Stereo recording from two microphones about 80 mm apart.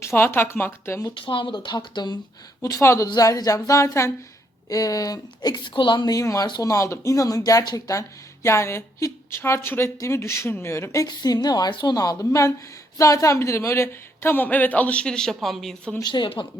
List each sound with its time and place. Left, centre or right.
0.0 s speech: left
1.1 s speech: left
2.6 s speech: left
2.8 s speech: left
3.2 s a woman's voice: left
6.1 s speech: left
11.0 s a woman's voice: left
11.7 s speech: left
11.9 s speech: left; by 16.0 s centre
16.0 s speech: left